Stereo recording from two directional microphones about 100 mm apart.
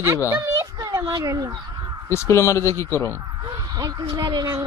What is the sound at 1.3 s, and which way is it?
Speech, 35° right (ahead or behind).